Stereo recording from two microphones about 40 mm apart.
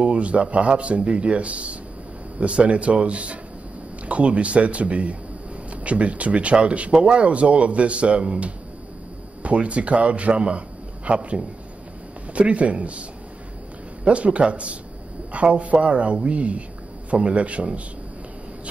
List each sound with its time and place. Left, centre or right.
0.0 s a man's voice: right
14.0 s speech: right